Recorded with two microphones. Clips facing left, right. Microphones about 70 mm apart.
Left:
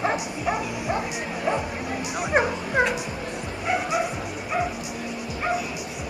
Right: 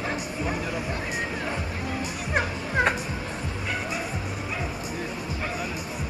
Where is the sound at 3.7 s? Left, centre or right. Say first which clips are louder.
Left 8 dB; centre.